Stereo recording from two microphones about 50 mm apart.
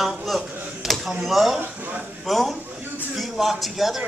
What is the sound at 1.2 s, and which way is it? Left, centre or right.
Speech, centre.